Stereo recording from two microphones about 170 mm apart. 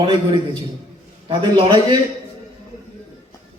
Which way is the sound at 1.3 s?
25° right (ahead or behind).